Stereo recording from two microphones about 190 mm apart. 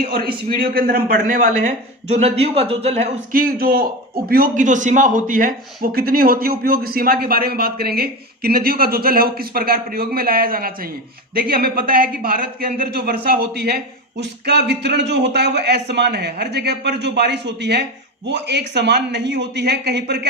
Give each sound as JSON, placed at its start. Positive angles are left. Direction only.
{"t": 0.1, "sound": "a man's voice", "side_deg": -50}
{"t": 3.3, "sound": "a man's voice", "side_deg": -50}